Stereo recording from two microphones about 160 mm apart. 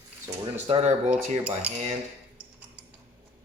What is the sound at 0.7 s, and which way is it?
Speech, 40° right (ahead or behind).